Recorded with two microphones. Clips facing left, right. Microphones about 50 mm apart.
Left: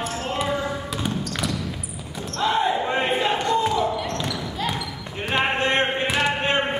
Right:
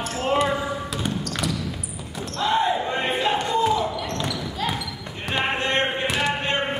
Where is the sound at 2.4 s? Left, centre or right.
Centre.